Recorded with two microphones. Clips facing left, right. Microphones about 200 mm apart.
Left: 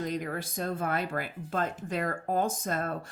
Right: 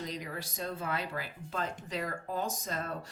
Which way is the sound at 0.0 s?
55° left (ahead or behind).